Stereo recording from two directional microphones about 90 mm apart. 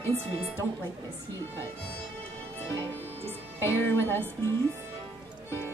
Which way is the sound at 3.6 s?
25° left (ahead or behind).